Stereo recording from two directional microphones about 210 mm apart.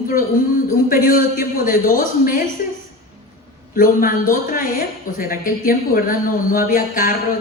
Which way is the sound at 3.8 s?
40° left (ahead or behind).